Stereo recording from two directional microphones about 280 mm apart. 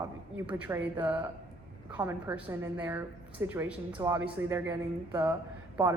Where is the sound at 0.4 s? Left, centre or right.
Centre.